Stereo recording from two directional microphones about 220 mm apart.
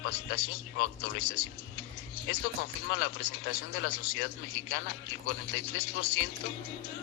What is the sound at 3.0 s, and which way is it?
A man's voice, 50° left (ahead or behind).